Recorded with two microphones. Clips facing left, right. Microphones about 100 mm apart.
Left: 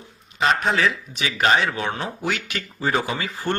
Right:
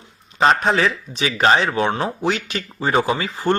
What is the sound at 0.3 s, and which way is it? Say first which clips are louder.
Speech: right 4 dB; 35° right (ahead or behind).